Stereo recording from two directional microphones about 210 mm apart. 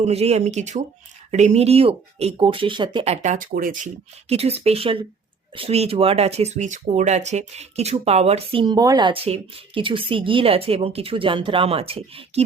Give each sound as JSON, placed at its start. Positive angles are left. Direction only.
{"t": 0.0, "sound": "speech", "side_deg": -30}
{"t": 4.3, "sound": "speech", "side_deg": -30}